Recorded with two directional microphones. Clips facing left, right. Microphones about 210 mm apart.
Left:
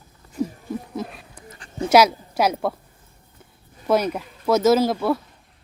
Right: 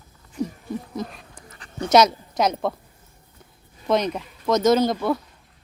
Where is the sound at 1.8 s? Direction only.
5° left (ahead or behind).